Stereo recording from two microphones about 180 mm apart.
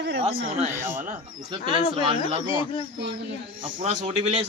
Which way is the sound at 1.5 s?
25° right (ahead or behind).